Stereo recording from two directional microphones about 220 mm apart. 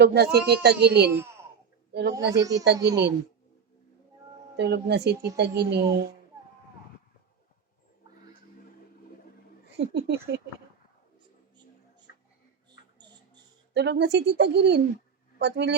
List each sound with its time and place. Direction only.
0.0 s speech: 50° right (ahead or behind)
1.1 s speech: 10° right (ahead or behind)
1.9 s a woman's voice: 45° right (ahead or behind)
2.4 s speech: 15° right (ahead or behind)
4.5 s speech: 50° right (ahead or behind)
9.7 s speech: 50° right (ahead or behind)
13.0 s a sound: 20° right (ahead or behind)
13.7 s speech: 50° right (ahead or behind)